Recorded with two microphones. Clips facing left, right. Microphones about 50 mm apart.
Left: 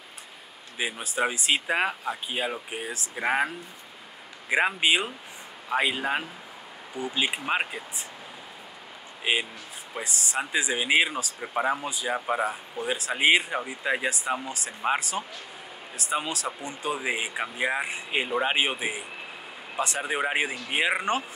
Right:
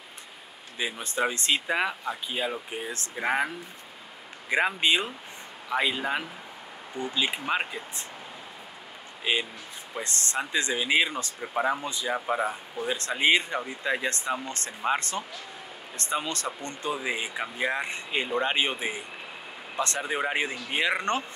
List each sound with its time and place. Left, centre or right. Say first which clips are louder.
0.7 s speech: left 1 dB; centre
4.5 s speech: left 1 dB; centre
9.2 s speech: left 1 dB; centre